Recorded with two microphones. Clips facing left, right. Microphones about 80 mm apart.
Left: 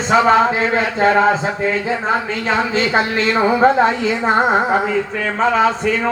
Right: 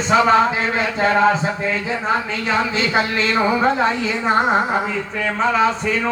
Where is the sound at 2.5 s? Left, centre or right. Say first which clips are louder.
Left 3 dB; left.